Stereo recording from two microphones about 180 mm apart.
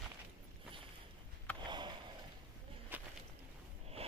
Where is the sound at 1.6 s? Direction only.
25° right (ahead or behind).